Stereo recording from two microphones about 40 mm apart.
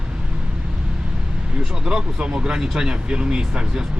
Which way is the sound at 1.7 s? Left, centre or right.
Centre.